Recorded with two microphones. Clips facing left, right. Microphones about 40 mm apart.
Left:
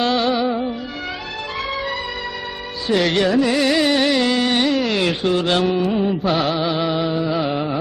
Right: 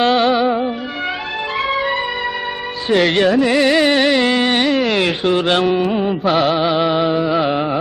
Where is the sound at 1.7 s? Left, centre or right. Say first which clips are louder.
Right 6 dB; right.